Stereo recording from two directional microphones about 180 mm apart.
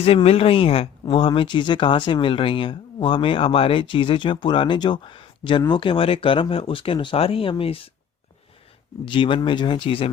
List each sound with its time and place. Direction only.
0.0 s speech: 35° left (ahead or behind)
9.0 s speech: 30° left (ahead or behind)